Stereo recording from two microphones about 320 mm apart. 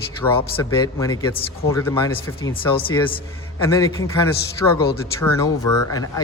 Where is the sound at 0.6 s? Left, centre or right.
Centre.